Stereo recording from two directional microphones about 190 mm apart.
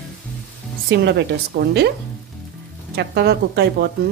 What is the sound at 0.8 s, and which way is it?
A woman's voice, 65° right (ahead or behind).